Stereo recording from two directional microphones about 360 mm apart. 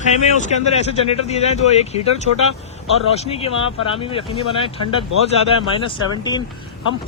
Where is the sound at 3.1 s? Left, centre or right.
Centre.